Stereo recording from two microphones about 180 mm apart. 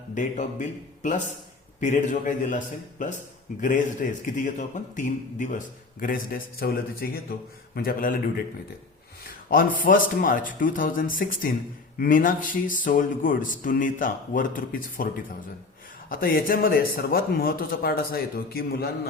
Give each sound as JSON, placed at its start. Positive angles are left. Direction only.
{"t": 0.1, "sound": "a man's voice", "side_deg": 40}